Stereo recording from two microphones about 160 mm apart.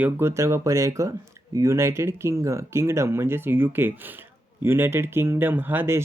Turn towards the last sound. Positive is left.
turn(degrees=-15)  # may be behind; listen again after turning